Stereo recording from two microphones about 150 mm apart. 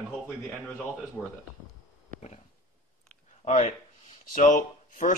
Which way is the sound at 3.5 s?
50° left (ahead or behind).